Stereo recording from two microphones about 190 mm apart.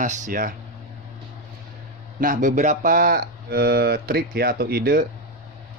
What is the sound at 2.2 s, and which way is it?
Speech, 45° right (ahead or behind).